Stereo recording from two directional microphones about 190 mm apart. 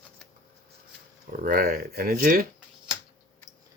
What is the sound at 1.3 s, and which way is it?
Speech, 45° right (ahead or behind).